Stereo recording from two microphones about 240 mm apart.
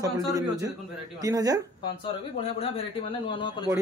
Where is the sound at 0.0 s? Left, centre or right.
Centre.